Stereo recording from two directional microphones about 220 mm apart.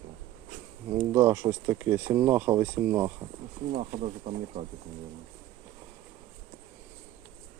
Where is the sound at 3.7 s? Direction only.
30° right (ahead or behind).